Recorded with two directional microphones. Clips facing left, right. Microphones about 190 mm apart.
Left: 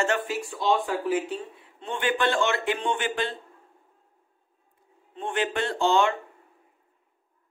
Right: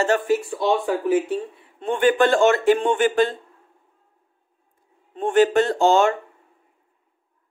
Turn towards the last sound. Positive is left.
turn(degrees=-45)  # may be behind; listen again after turning